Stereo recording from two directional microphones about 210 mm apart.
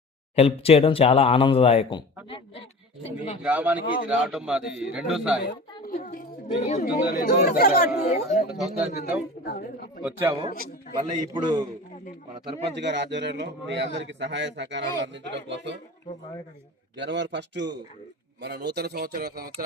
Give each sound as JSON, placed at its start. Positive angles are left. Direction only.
{"t": 0.3, "sound": "speech", "side_deg": 30}
{"t": 3.4, "sound": "speech", "side_deg": -5}
{"t": 5.4, "sound": "a woman's voice", "side_deg": 50}
{"t": 6.8, "sound": "speech", "side_deg": 45}
{"t": 7.9, "sound": "a woman's voice", "side_deg": 35}
{"t": 8.9, "sound": "speech", "side_deg": 50}
{"t": 10.0, "sound": "speech", "side_deg": -10}
{"t": 10.9, "sound": "a man's voice", "side_deg": -20}
{"t": 12.7, "sound": "a man's voice", "side_deg": -55}
{"t": 17.0, "sound": "a man's voice", "side_deg": -55}